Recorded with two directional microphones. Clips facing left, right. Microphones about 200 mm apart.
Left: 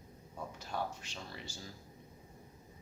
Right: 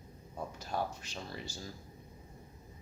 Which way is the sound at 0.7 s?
40° right (ahead or behind).